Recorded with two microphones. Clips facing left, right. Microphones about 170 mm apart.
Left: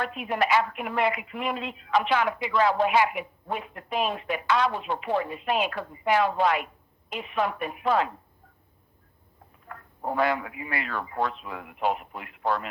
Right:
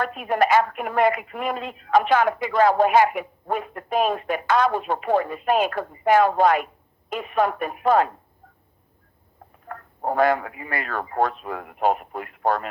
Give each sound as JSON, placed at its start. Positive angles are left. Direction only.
{"t": 0.0, "sound": "speech", "side_deg": -45}
{"t": 9.6, "sound": "speech", "side_deg": -50}